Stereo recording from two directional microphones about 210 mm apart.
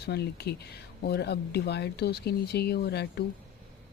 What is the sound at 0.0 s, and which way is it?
Speech, 50° left (ahead or behind).